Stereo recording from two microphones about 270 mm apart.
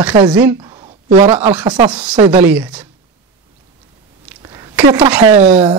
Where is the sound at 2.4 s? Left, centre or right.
Centre.